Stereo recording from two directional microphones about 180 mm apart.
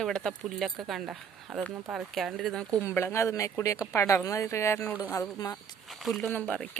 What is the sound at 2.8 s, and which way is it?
Speech, 15° left (ahead or behind).